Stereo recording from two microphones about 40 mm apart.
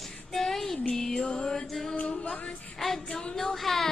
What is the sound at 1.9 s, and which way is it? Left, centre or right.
Music, left.